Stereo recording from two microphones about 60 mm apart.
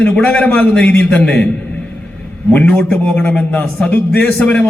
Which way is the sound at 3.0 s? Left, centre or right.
Left.